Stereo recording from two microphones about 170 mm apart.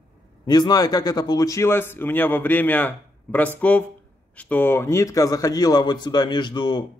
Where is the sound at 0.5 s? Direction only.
25° left (ahead or behind).